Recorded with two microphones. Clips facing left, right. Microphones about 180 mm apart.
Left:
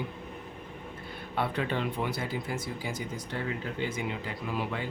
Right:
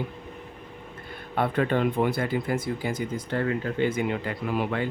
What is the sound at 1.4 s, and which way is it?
Speech, 50° right (ahead or behind).